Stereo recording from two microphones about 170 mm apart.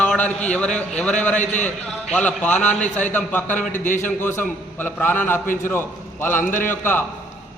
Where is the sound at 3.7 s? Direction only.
50° left (ahead or behind).